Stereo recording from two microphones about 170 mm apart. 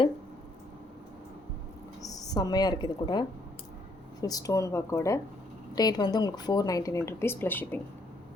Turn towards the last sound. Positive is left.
turn(degrees=10)  # may be behind; listen again after turning